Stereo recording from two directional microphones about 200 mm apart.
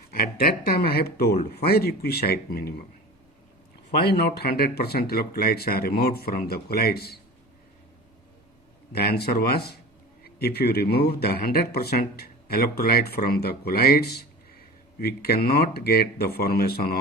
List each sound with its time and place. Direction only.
0.1 s speech: 50° left (ahead or behind)
4.0 s speech: 55° left (ahead or behind)
8.9 s speech: 50° left (ahead or behind)